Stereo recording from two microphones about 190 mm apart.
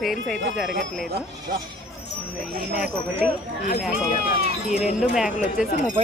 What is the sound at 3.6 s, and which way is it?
Speech, 45° left (ahead or behind).